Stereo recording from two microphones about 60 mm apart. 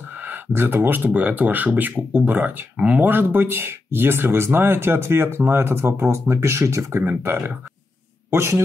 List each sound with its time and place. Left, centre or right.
0.5 s speech: right
7.2 s a man's voice: right